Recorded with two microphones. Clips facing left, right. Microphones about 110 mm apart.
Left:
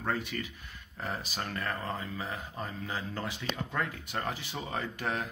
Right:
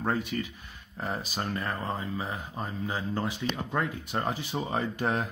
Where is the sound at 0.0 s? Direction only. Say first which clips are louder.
Right 4 dB; 20° right (ahead or behind).